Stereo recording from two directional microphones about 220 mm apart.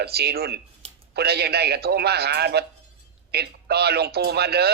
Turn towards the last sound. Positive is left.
turn(degrees=-45)  # may be behind; listen again after turning